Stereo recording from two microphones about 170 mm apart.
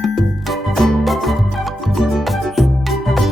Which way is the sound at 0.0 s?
Centre (ahead or behind).